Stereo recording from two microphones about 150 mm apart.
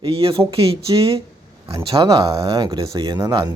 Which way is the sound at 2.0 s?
30° right (ahead or behind).